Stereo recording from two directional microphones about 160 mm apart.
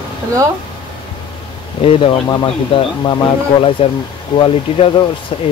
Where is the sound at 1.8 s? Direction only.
35° left (ahead or behind).